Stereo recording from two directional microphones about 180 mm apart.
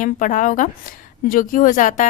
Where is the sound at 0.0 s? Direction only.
45° left (ahead or behind).